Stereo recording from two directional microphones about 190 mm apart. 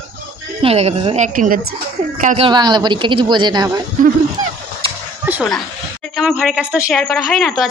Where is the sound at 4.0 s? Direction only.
45° right (ahead or behind).